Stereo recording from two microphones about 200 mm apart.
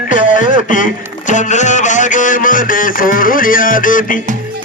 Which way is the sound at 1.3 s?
40° left (ahead or behind).